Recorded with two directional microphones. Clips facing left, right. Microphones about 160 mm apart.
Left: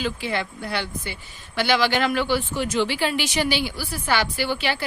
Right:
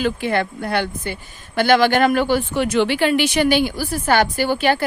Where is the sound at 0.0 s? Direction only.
50° right (ahead or behind).